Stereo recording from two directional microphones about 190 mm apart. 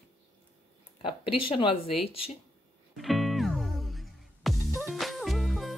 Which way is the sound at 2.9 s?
Centre (ahead or behind).